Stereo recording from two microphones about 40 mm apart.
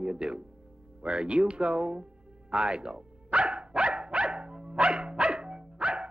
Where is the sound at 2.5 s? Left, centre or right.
Right.